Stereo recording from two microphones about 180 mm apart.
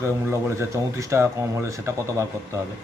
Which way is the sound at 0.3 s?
15° right (ahead or behind).